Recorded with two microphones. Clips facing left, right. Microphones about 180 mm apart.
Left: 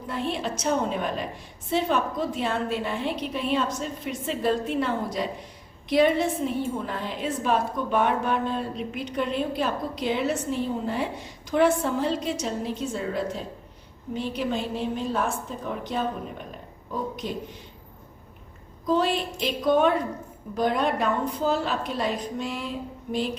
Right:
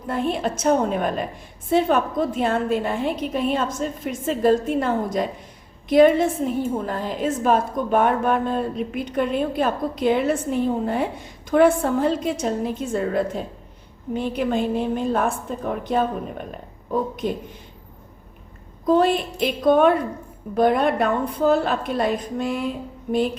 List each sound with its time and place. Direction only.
0.1 s a woman's voice: 50° right (ahead or behind)
18.9 s a woman's voice: 55° right (ahead or behind)